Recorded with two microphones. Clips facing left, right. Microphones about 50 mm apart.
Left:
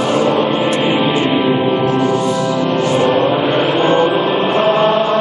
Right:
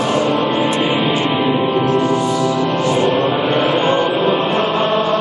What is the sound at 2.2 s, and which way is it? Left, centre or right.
Music, left.